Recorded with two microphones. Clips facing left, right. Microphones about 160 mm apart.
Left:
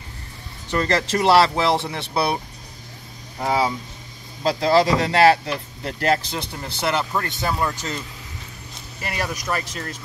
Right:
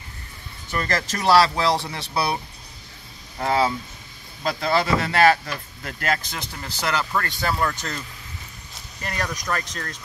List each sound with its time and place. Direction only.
0.7 s speech: 30° left (ahead or behind)
3.3 s speech: 10° left (ahead or behind)
4.4 s speech: 30° left (ahead or behind); by 8.0 s 10° left (ahead or behind)
9.0 s speech: 5° left (ahead or behind)